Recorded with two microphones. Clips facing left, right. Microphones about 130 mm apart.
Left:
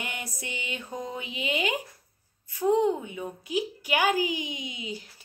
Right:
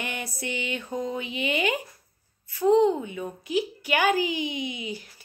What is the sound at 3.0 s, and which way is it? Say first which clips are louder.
Speech: right 3 dB; 15° left (ahead or behind).